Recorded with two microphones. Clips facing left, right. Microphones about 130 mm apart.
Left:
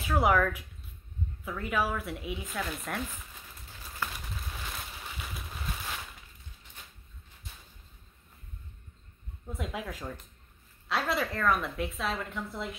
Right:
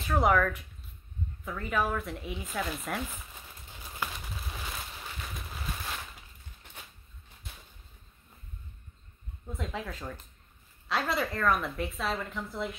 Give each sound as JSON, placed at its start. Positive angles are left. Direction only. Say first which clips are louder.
{"t": 0.0, "sound": "a woman's voice", "louder": "even", "side_deg": 5}
{"t": 3.7, "sound": "bird", "louder": "even", "side_deg": -15}
{"t": 4.1, "sound": "a sound", "louder": "right 1 dB", "side_deg": -5}
{"t": 5.0, "sound": "boat", "louder": "even", "side_deg": 5}
{"t": 9.5, "sound": "a woman's voice", "louder": "even", "side_deg": 5}